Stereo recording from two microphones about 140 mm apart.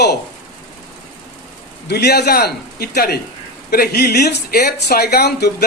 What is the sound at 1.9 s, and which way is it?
Speech, 90° left.